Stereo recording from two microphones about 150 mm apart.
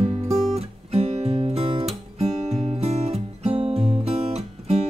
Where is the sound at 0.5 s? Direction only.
45° right (ahead or behind).